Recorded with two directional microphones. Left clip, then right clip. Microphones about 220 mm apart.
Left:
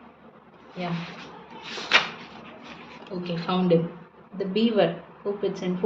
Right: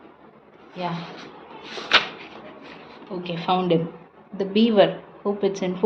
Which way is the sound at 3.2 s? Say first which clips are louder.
Right 3 dB; 40° right (ahead or behind).